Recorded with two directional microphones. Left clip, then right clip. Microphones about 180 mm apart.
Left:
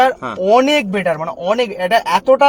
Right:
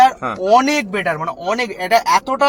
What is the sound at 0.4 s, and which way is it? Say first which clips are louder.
Speech: left 2 dB; 55° left (ahead or behind).